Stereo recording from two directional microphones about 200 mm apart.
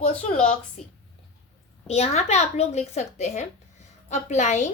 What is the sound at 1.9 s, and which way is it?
Speech, 35° left (ahead or behind).